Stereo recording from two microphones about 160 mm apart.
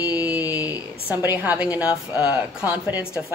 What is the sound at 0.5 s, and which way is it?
Speech, 10° right (ahead or behind).